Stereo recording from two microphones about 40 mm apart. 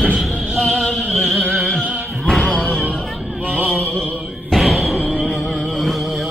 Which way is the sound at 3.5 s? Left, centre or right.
Right.